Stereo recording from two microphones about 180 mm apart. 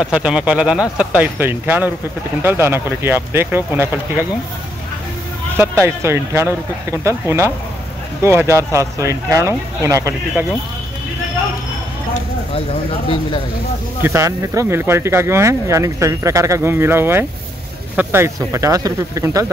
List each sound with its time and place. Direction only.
0.0 s speech: 5° right (ahead or behind)
5.6 s speech: 15° right (ahead or behind)
14.0 s speech: 15° right (ahead or behind)